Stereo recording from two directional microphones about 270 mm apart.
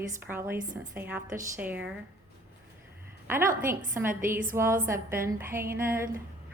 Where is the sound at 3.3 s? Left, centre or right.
Centre.